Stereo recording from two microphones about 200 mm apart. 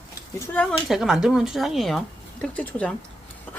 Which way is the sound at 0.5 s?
Centre (ahead or behind).